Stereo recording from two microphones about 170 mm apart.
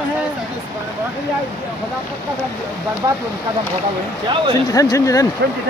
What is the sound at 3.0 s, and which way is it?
Speech, 20° right (ahead or behind).